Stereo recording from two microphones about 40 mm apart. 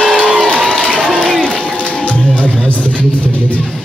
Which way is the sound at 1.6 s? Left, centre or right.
Left.